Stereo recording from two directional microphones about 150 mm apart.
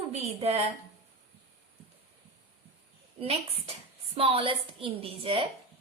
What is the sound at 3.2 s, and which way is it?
A woman's voice, 40° right (ahead or behind).